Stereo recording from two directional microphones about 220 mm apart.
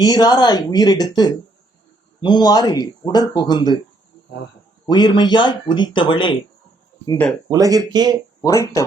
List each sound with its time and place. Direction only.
0.0 s speech: 20° left (ahead or behind)
4.9 s speech: 20° left (ahead or behind)
7.5 s speech: 15° right (ahead or behind)
8.4 s speech: 15° left (ahead or behind)